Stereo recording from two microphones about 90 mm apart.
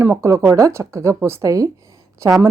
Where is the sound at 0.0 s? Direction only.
30° right (ahead or behind).